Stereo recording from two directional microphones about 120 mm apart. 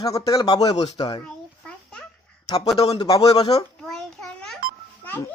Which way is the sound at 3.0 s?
30° left (ahead or behind).